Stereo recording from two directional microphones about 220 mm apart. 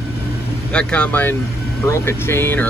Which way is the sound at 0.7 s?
5° left (ahead or behind).